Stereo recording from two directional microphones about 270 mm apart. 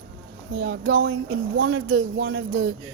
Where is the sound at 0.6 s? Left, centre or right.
Right.